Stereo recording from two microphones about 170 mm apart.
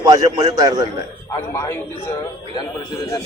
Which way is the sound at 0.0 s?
20° right (ahead or behind).